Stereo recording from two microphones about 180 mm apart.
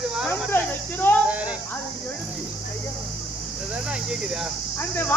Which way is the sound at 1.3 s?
5° right (ahead or behind).